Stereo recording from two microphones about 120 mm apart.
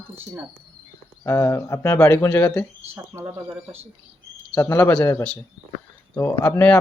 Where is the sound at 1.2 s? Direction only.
25° left (ahead or behind).